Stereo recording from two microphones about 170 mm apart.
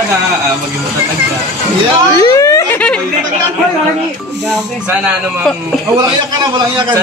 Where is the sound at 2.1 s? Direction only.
20° left (ahead or behind).